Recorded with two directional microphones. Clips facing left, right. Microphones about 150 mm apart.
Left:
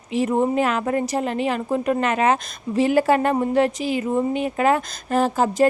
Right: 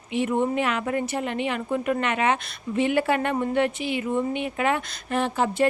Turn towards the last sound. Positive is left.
turn(degrees=40)  # may be behind; listen again after turning